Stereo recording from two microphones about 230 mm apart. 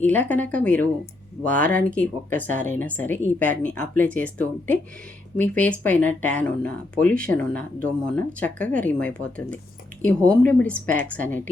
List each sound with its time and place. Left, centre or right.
0.0 s a woman's voice: centre